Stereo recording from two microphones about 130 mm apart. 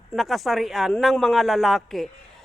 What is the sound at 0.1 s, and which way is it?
A woman's voice, centre (ahead or behind).